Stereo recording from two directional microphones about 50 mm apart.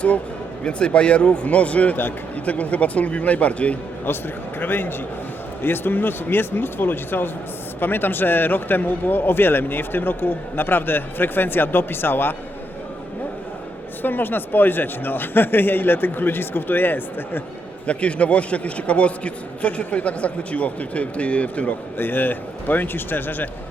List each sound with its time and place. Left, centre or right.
0.6 s a man's voice: centre
4.6 s speech: left
14.0 s speech: left
17.8 s a man's voice: left
21.9 s speech: left